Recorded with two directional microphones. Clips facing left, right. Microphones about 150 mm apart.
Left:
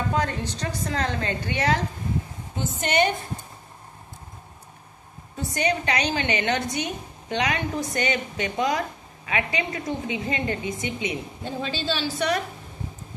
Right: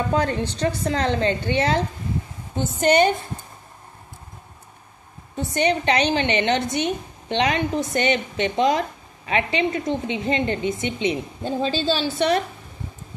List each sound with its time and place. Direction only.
0.2 s a woman's voice: 30° right (ahead or behind)
2.8 s a woman's voice: 35° right (ahead or behind)
5.4 s a woman's voice: 25° right (ahead or behind)